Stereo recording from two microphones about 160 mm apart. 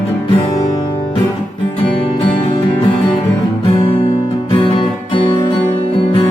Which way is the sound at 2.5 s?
30° left (ahead or behind).